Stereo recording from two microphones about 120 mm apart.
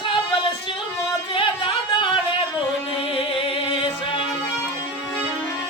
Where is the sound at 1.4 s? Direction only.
45° left (ahead or behind).